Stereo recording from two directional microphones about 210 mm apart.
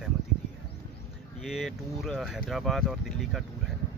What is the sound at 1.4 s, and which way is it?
Speech, centre (ahead or behind).